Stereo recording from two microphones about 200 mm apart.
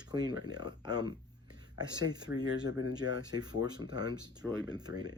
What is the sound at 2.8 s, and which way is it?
Speech, 80° left.